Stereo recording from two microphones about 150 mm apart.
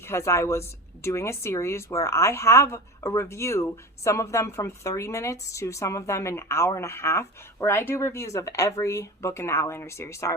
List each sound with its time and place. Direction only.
0.0 s a woman's voice: 20° left (ahead or behind)